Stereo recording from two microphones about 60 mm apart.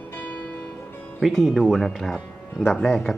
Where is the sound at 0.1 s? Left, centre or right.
Left.